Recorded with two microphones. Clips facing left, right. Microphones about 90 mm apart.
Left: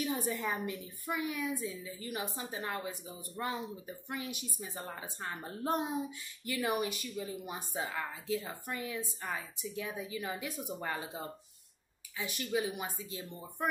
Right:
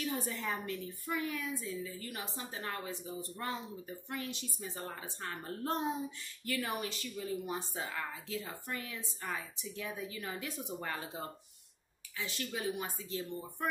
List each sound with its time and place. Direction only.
0.0 s speech: 15° left (ahead or behind)